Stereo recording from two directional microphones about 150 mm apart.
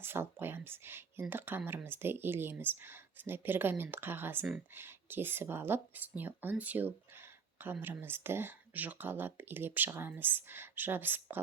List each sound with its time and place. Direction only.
0.0 s speech: 15° right (ahead or behind)